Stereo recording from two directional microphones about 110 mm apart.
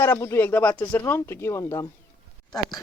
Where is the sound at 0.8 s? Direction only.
25° left (ahead or behind).